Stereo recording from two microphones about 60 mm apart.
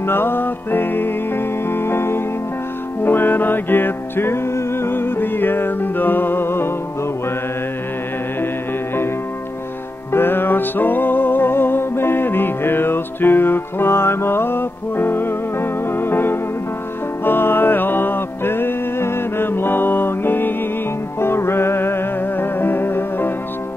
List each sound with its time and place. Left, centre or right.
0.0 s music: left
10.1 s music: left